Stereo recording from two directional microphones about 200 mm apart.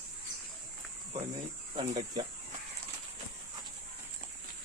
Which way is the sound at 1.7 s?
30° right (ahead or behind).